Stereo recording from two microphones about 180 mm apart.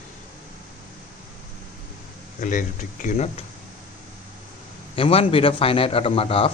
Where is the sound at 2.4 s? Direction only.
45° left (ahead or behind).